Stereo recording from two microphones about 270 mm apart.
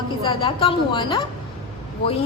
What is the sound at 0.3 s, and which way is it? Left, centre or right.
A woman's voice, centre.